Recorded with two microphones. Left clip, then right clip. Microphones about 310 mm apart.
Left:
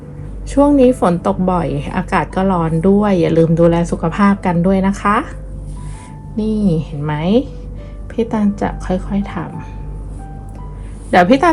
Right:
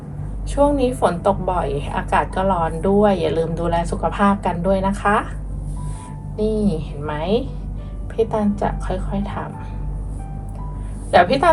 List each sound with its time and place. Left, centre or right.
0.6 s a woman's voice: left
6.3 s a woman's voice: left
8.3 s a woman's voice: left
11.1 s a woman's voice: left